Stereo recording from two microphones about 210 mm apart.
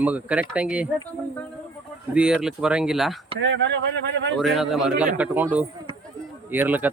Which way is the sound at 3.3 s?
60° right (ahead or behind).